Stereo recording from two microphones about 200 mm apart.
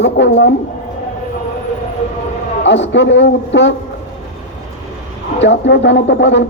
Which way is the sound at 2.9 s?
65° left (ahead or behind).